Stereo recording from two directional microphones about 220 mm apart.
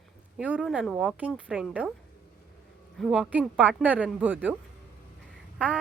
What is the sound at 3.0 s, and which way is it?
Speech, 5° right (ahead or behind).